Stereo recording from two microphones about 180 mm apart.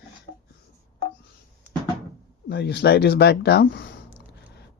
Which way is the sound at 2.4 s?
65° left (ahead or behind).